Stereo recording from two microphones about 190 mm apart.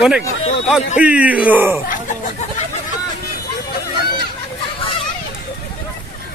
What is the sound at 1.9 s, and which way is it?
Chicken, 40° left (ahead or behind).